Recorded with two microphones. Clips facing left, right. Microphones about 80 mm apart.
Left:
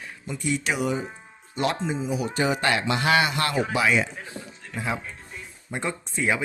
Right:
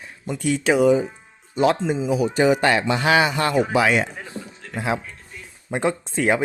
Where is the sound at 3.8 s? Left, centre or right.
Right.